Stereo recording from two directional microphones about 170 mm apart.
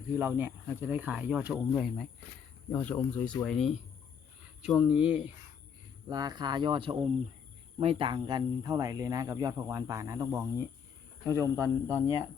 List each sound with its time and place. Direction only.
0.2 s speech: 15° right (ahead or behind)
1.7 s speech: centre (ahead or behind)
6.1 s speech: 25° right (ahead or behind)